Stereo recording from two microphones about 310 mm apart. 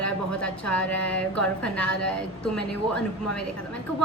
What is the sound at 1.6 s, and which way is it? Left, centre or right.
Speech, centre.